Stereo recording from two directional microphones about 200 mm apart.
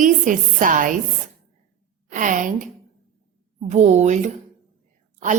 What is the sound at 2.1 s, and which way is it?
A woman's voice, 40° right (ahead or behind).